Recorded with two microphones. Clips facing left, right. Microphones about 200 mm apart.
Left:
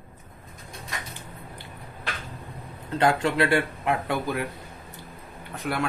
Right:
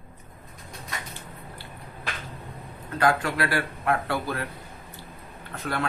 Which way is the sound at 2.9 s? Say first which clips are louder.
Left 2 dB; 25° left (ahead or behind).